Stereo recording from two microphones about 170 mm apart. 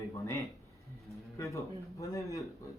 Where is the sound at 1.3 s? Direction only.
20° left (ahead or behind).